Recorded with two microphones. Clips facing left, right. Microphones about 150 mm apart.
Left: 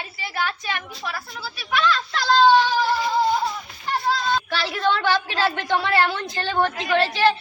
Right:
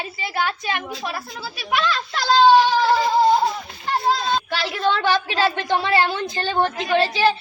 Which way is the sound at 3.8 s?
25° right (ahead or behind).